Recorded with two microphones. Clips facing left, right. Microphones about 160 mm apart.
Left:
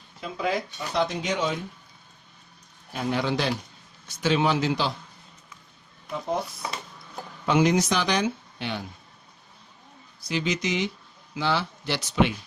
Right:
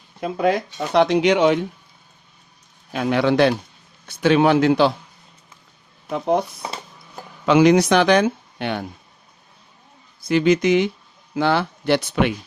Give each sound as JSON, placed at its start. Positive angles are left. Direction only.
{"t": 0.2, "sound": "speech", "side_deg": -55}
{"t": 0.9, "sound": "speech", "side_deg": -70}
{"t": 2.9, "sound": "speech", "side_deg": -75}
{"t": 6.1, "sound": "speech", "side_deg": -65}
{"t": 7.4, "sound": "speech", "side_deg": -90}
{"t": 10.2, "sound": "speech", "side_deg": -55}